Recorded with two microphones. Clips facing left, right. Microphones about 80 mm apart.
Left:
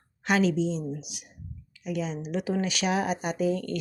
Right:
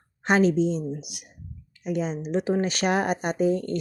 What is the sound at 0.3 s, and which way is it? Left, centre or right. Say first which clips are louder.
A woman's voice: right 4 dB; right.